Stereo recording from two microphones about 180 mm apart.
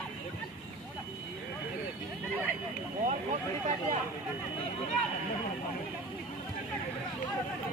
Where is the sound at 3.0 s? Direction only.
40° right (ahead or behind).